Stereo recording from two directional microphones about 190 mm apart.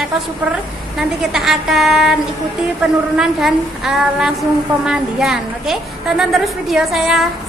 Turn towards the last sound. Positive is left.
turn(degrees=0)  # may be behind; listen again after turning